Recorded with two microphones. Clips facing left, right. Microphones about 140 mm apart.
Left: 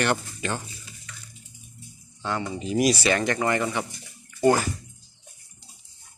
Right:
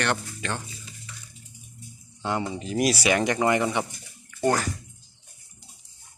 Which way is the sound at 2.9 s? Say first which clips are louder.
Right 1 dB; 10° right (ahead or behind).